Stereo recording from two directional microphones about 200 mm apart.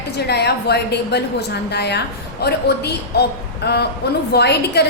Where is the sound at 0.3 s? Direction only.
55° left (ahead or behind).